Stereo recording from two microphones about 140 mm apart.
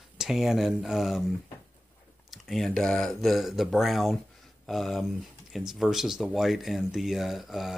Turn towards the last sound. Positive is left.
turn(degrees=0)  # may be behind; listen again after turning